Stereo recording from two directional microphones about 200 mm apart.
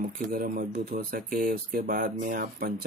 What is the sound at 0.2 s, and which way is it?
Speech, 40° right (ahead or behind).